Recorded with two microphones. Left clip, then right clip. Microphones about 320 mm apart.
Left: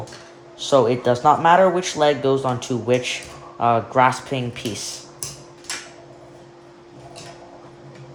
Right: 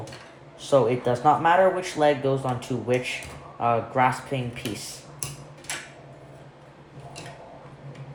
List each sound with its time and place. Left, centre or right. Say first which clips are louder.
0.7 s speech: left 4 dB; left